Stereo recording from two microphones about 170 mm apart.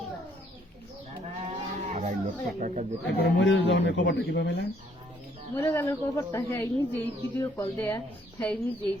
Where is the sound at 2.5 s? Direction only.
45° right (ahead or behind).